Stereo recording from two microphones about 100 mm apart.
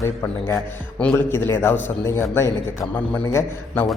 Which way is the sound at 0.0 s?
30° left (ahead or behind).